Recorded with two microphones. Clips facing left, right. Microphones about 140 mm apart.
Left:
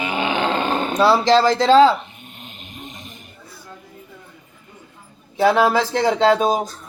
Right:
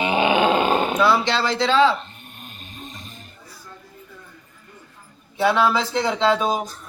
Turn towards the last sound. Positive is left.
turn(degrees=40)  # may be behind; listen again after turning